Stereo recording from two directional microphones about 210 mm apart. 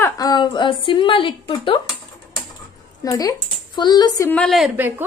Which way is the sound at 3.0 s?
15° left (ahead or behind).